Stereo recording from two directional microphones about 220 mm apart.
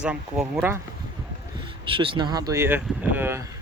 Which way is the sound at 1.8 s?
20° right (ahead or behind).